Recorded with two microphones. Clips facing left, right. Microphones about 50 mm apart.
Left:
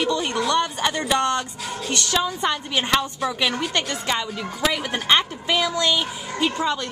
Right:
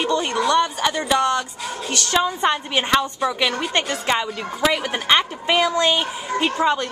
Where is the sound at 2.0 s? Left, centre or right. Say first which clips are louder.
Right 5 dB; centre.